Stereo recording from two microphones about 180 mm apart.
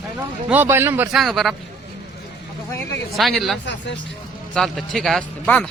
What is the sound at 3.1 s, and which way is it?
Speech, centre (ahead or behind).